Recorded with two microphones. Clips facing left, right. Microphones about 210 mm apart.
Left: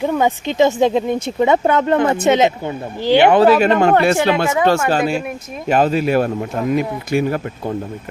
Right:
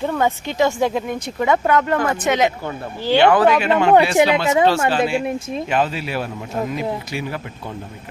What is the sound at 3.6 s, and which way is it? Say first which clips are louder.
Speech: left 1 dB; 45° left (ahead or behind).